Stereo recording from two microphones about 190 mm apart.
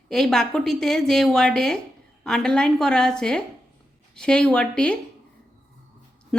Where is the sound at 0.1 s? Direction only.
Centre (ahead or behind).